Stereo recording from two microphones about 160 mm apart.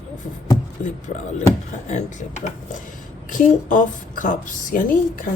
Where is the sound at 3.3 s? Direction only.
55° left (ahead or behind).